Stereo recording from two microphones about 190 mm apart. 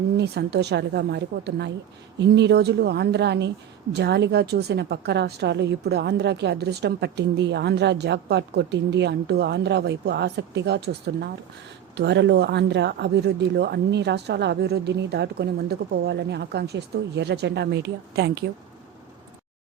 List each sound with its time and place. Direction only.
0.2 s a woman's voice: 60° right (ahead or behind)